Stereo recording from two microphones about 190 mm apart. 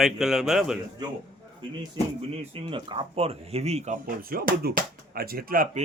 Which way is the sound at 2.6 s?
25° right (ahead or behind).